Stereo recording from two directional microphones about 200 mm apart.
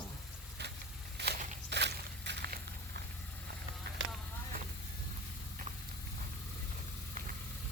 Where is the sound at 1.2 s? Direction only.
55° right (ahead or behind).